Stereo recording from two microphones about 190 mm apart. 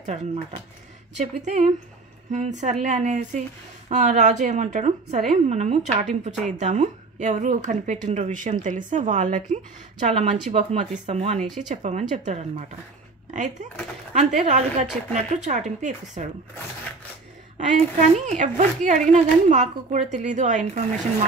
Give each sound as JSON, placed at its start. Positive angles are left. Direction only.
{"t": 0.0, "sound": "a woman's voice", "side_deg": -35}
{"t": 17.6, "sound": "a woman's voice", "side_deg": -40}